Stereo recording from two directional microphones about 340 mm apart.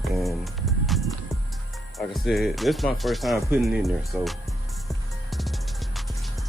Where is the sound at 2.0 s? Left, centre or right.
Centre.